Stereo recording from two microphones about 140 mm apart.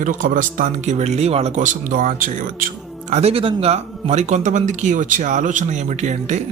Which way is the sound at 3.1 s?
50° right (ahead or behind).